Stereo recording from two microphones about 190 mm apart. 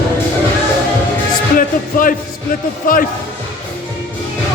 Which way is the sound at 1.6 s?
45° left (ahead or behind).